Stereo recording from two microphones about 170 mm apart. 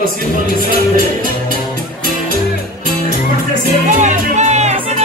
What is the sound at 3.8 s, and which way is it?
Music, 45° right (ahead or behind).